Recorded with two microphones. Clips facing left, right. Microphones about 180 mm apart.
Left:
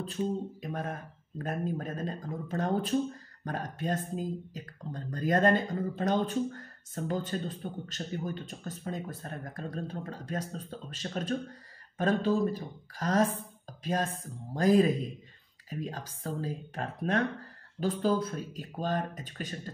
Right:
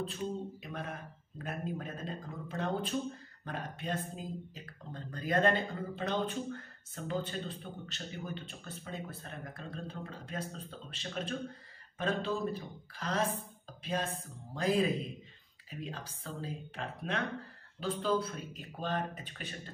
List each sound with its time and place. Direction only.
0.0 s speech: 40° left (ahead or behind)
13.7 s music: 40° left (ahead or behind)
14.5 s speech: 40° left (ahead or behind)